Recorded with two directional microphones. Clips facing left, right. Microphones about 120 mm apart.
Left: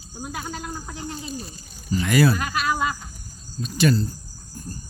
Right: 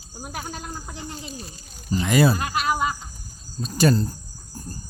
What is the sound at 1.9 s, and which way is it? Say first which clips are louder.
Speech: even; 25° right (ahead or behind).